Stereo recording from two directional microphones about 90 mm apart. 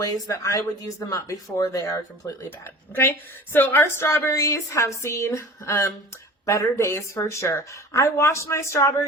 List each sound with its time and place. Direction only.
0.0 s speech: 35° left (ahead or behind)